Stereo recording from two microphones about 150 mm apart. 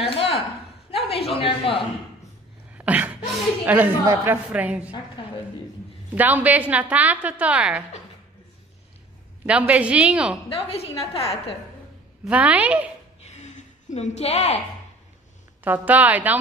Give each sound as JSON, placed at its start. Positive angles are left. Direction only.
{"t": 0.0, "sound": "a sound", "side_deg": 40}
{"t": 0.9, "sound": "a woman's voice", "side_deg": 40}
{"t": 2.8, "sound": "a sound", "side_deg": -10}
{"t": 3.6, "sound": "a woman's voice", "side_deg": -10}
{"t": 4.5, "sound": "a woman's voice", "side_deg": -10}
{"t": 6.1, "sound": "a woman's voice", "side_deg": -10}
{"t": 9.5, "sound": "a woman's voice", "side_deg": -10}
{"t": 10.5, "sound": "a woman's voice", "side_deg": 40}
{"t": 12.3, "sound": "a woman's voice", "side_deg": -10}
{"t": 13.2, "sound": "a sound", "side_deg": 50}
{"t": 15.6, "sound": "a woman's voice", "side_deg": -10}